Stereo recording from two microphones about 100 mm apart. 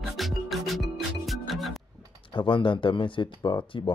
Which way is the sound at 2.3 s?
55° left (ahead or behind).